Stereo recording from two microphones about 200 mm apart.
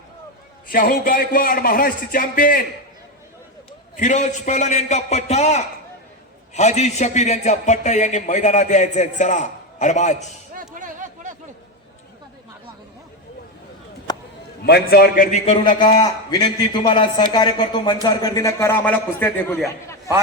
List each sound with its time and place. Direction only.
0.7 s a man's voice: 45° left (ahead or behind)
3.9 s a man's voice: 40° left (ahead or behind)
10.8 s a sound: 40° right (ahead or behind)
14.6 s a man's voice: 50° left (ahead or behind)
15.6 s a man's voice: 20° left (ahead or behind)